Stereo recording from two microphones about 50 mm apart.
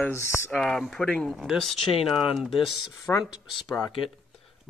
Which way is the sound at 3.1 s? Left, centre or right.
Left.